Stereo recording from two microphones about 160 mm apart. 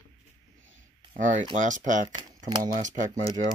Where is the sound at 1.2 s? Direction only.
50° right (ahead or behind).